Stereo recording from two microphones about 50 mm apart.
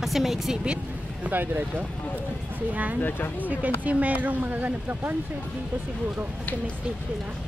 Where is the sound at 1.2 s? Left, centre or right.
Right.